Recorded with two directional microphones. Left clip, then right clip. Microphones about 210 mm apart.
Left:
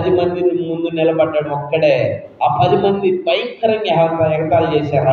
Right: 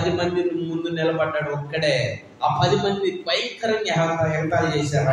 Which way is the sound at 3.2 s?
5° left (ahead or behind).